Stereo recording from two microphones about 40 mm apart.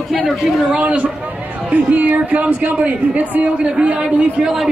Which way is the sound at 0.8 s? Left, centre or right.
Right.